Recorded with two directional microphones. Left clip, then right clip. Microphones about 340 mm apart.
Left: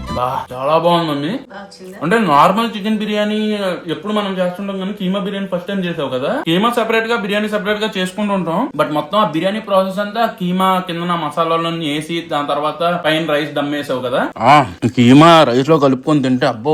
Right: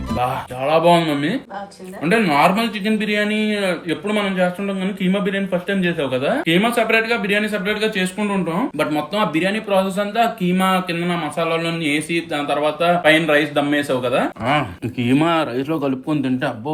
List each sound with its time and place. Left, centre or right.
0.2 s speech: centre
15.6 s a man's voice: left
16.1 s speech: centre